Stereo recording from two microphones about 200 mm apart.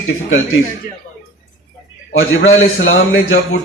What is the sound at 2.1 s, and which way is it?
A man's voice, 80° left.